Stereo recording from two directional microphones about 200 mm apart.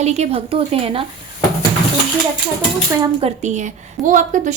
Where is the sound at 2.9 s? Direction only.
25° right (ahead or behind); by 4.5 s 40° right (ahead or behind).